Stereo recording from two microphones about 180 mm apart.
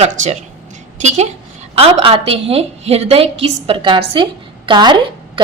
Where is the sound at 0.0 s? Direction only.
40° right (ahead or behind).